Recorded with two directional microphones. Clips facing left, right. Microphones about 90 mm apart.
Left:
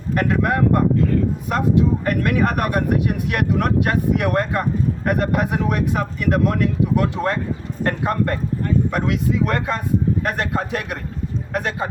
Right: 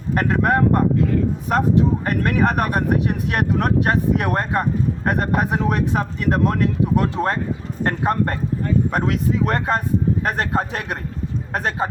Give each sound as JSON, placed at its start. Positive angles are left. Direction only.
{"t": 0.1, "sound": "speech", "side_deg": -35}